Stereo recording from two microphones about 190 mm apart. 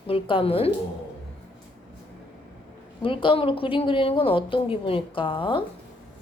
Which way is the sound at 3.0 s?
25° left (ahead or behind).